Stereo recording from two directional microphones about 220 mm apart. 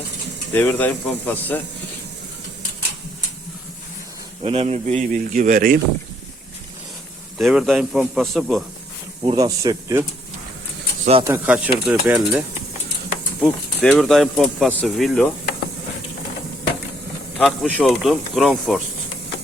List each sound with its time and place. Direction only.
0.5 s speech: 10° left (ahead or behind)
4.4 s speech: 30° right (ahead or behind)
7.3 s speech: centre (ahead or behind)
9.2 s speech: 15° right (ahead or behind)
11.2 s speech: 10° right (ahead or behind)
13.4 s speech: centre (ahead or behind)
17.3 s speech: 5° left (ahead or behind)